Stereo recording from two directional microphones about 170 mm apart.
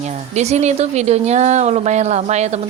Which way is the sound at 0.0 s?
40° right (ahead or behind).